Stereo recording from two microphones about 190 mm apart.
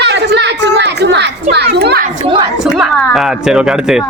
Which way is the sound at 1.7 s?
55° right (ahead or behind).